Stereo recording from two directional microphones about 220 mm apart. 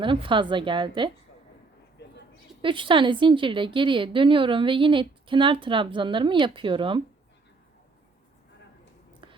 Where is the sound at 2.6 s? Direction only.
25° right (ahead or behind).